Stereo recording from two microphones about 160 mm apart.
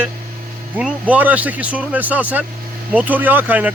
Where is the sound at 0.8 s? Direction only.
10° right (ahead or behind).